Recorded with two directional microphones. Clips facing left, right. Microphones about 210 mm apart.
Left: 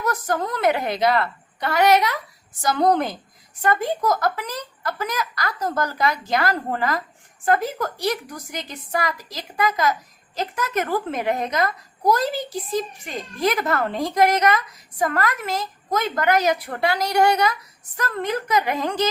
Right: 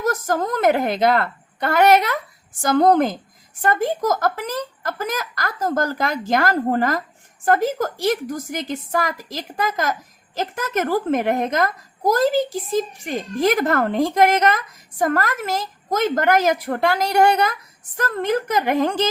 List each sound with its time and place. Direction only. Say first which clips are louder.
0.0 s a woman's voice: right 3 dB; 45° right (ahead or behind)